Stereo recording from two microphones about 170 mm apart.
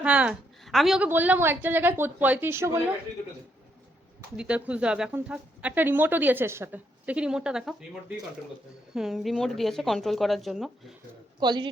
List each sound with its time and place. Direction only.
0.0 s speech: 5° right (ahead or behind)
4.4 s speech: 5° right (ahead or behind)
9.0 s speech: centre (ahead or behind)
11.3 s speech: 25° right (ahead or behind)